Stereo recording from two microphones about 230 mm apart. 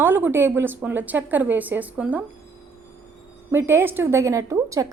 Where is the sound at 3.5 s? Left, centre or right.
Centre.